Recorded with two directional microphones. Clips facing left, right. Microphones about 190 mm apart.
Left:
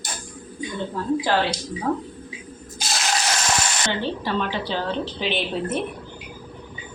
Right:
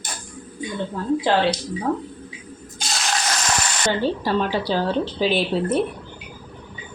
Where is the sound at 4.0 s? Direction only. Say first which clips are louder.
Right 5 dB; 40° right (ahead or behind).